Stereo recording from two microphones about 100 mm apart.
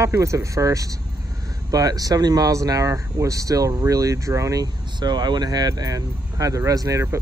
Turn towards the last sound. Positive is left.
turn(degrees=-35)  # may be behind; listen again after turning